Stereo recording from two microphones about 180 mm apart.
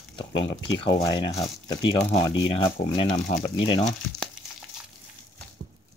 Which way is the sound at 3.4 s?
30° left (ahead or behind).